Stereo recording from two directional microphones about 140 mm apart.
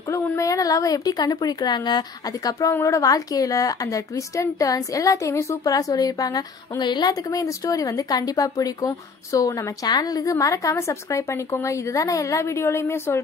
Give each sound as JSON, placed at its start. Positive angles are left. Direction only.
{"t": 0.1, "sound": "a woman's voice", "side_deg": 25}